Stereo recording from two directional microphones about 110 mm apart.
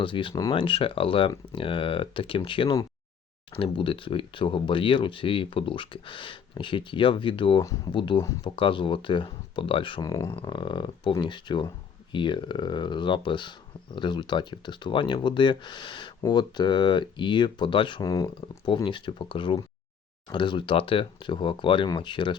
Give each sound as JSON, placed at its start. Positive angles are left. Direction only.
{"t": 0.0, "sound": "speech", "side_deg": 50}
{"t": 7.6, "sound": "speech", "side_deg": 30}
{"t": 7.9, "sound": "speech", "side_deg": 50}
{"t": 10.0, "sound": "speech", "side_deg": 30}
{"t": 10.4, "sound": "speech", "side_deg": 45}
{"t": 18.0, "sound": "speech", "side_deg": 30}
{"t": 18.3, "sound": "speech", "side_deg": 50}